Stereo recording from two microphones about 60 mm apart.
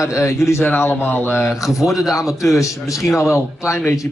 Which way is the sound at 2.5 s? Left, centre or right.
Left.